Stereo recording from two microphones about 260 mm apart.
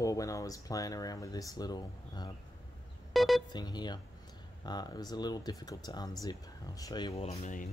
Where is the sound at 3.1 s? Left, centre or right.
Centre.